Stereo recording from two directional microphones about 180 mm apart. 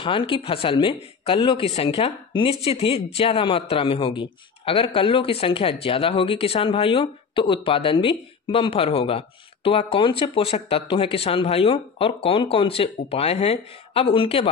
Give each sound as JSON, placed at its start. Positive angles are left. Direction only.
{"t": 0.0, "sound": "speech", "side_deg": 30}